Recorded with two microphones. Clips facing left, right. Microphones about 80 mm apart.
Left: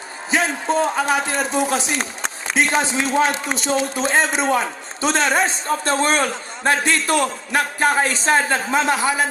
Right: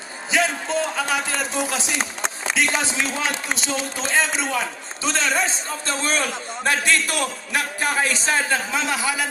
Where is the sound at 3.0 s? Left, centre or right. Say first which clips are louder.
Left 6 dB; left.